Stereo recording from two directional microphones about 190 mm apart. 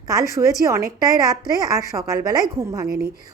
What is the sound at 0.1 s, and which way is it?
A woman's voice, 20° right (ahead or behind).